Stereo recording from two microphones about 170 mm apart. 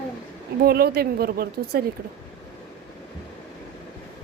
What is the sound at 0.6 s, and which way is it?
Speech, 65° right (ahead or behind).